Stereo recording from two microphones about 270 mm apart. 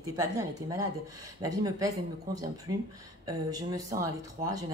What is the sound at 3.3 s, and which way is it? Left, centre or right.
A woman's voice, centre.